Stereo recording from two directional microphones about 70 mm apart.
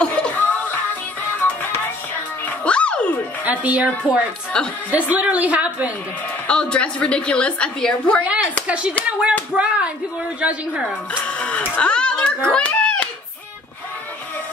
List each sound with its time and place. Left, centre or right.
0.0 s music: centre
2.6 s music: centre
3.4 s a woman's voice: right
4.5 s a woman's voice: centre
4.9 s a woman's voice: right
6.4 s a woman's voice: centre
8.6 s a woman's voice: centre
11.2 s music: centre